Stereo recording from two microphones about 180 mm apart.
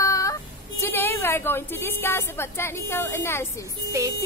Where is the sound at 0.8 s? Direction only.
10° left (ahead or behind).